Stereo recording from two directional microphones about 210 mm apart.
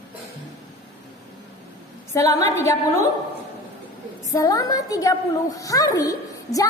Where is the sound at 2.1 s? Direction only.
15° left (ahead or behind).